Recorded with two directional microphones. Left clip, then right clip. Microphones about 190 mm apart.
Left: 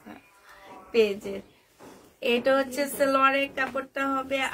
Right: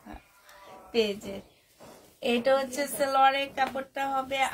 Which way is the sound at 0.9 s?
25° left (ahead or behind).